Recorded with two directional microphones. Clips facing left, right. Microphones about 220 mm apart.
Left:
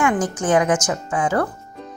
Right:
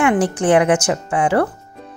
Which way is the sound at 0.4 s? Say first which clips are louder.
Right 3 dB; 65° right (ahead or behind).